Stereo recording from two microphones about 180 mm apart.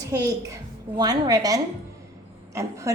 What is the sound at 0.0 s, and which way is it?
A child's voice, 20° right (ahead or behind).